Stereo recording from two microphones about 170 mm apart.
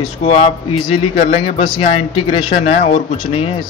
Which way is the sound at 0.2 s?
35° left (ahead or behind).